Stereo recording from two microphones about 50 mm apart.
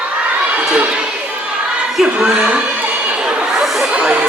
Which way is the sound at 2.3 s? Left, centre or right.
Right.